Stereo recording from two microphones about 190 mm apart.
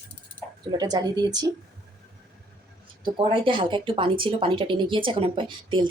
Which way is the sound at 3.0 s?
25° right (ahead or behind).